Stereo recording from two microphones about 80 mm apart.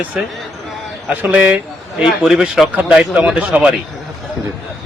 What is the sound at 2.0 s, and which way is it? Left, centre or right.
A man's voice, centre.